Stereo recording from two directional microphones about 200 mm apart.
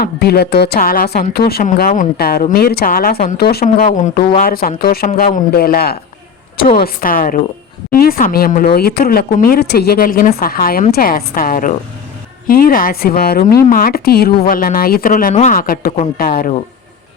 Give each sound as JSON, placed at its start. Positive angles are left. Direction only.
{"t": 0.0, "sound": "speech", "side_deg": 50}